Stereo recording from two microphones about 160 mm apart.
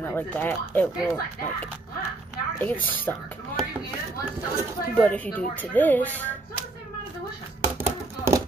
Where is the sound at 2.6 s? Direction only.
10° left (ahead or behind).